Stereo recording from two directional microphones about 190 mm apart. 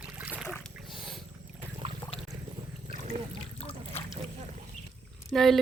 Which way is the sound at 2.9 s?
40° right (ahead or behind).